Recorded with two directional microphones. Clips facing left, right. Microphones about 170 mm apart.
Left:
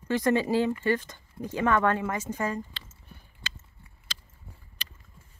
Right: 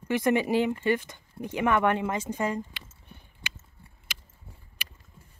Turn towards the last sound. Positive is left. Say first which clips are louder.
# right 1 dB
turn(degrees=-10)  # may be behind; listen again after turning